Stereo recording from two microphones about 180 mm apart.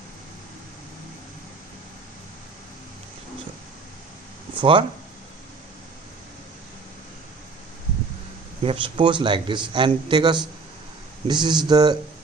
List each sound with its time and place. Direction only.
4.6 s a man's voice: 30° right (ahead or behind)
8.6 s a man's voice: 30° right (ahead or behind)